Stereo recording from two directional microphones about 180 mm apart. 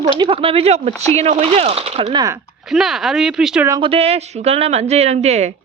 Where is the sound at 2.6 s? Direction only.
Centre (ahead or behind).